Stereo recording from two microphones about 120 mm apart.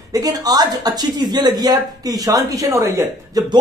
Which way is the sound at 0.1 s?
30° right (ahead or behind).